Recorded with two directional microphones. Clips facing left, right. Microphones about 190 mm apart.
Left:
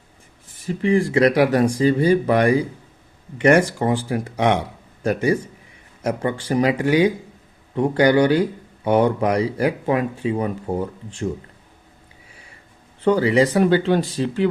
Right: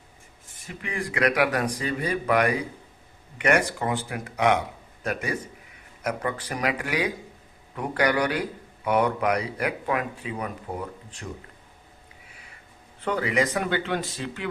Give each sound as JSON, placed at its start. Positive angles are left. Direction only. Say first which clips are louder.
{"t": 0.7, "sound": "speech", "louder": "left 14 dB", "side_deg": 30}
{"t": 13.1, "sound": "speech", "louder": "left 9 dB", "side_deg": 30}